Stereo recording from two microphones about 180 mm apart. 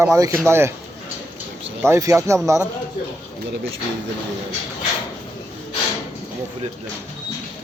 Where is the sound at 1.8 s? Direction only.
15° right (ahead or behind).